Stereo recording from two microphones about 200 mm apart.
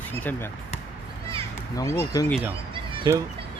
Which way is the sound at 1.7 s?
15° left (ahead or behind).